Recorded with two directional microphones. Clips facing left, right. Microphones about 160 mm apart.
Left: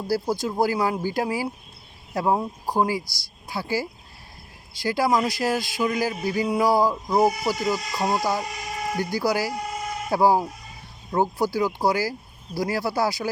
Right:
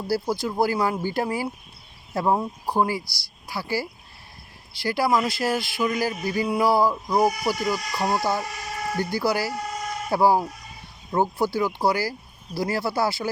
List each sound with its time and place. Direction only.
0.1 s a man's voice: 15° left (ahead or behind)